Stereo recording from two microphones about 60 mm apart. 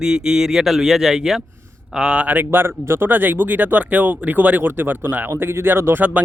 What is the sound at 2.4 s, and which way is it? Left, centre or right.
Speech, right.